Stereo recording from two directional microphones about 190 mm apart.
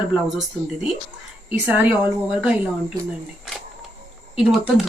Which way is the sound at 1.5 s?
10° right (ahead or behind).